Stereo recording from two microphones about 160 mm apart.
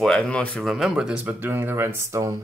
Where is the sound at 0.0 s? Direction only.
5° left (ahead or behind).